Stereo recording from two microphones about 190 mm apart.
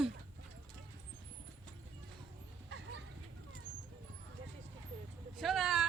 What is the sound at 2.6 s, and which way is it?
Bow-wow, 65° right (ahead or behind).